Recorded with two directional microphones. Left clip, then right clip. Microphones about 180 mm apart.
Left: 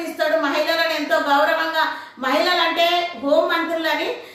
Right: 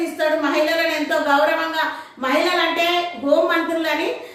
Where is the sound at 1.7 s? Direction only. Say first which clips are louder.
Left 1 dB; 20° right (ahead or behind).